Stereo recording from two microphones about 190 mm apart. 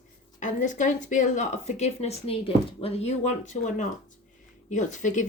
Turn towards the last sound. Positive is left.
turn(degrees=40)  # may be behind; listen again after turning